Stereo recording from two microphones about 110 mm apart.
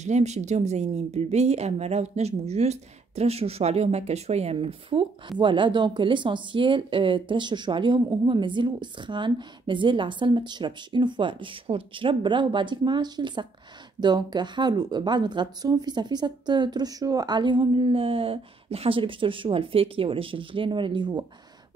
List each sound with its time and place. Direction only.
0.0 s a woman's voice: 90° right; by 21.3 s 45° right (ahead or behind)